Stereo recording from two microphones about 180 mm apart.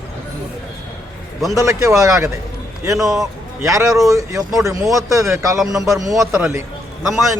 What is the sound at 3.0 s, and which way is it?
Speech, centre (ahead or behind).